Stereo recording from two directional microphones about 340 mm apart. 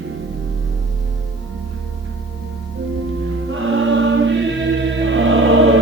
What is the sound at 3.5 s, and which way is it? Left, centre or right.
Music, right.